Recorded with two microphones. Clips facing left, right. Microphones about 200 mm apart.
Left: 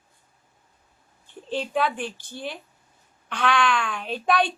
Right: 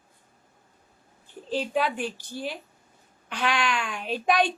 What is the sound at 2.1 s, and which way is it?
Speech, 40° right (ahead or behind).